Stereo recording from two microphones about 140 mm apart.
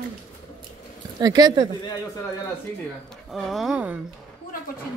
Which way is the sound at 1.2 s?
30° right (ahead or behind).